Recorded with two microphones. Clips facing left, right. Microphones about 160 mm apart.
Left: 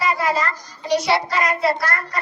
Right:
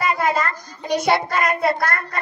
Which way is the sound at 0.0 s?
50° right (ahead or behind).